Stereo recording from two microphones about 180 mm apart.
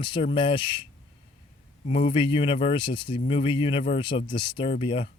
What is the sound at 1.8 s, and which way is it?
Speech, 30° left (ahead or behind).